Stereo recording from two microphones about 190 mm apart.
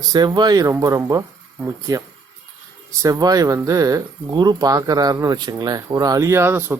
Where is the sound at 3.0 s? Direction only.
20° right (ahead or behind).